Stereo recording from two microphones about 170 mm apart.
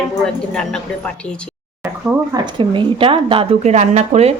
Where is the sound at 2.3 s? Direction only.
25° right (ahead or behind).